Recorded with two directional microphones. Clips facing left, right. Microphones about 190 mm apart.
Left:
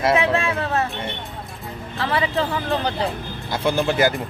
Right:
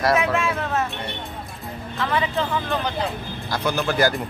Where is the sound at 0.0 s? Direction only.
25° left (ahead or behind).